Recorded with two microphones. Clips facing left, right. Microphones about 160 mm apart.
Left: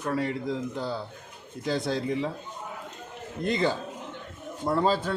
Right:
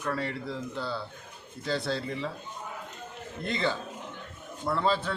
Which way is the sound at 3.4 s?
40° left (ahead or behind).